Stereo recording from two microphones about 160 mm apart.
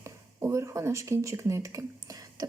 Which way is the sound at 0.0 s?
20° right (ahead or behind).